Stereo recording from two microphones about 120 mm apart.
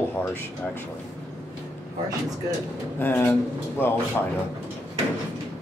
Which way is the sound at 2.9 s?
15° left (ahead or behind).